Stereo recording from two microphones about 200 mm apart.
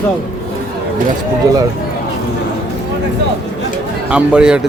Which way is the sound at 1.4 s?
20° right (ahead or behind).